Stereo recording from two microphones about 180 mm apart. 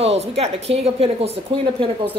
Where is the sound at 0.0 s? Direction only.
35° right (ahead or behind).